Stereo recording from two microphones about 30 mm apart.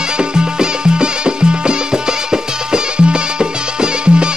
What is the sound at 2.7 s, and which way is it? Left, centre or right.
Music, right.